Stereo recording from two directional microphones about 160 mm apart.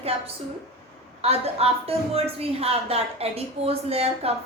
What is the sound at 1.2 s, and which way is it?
A woman's voice, 40° right (ahead or behind).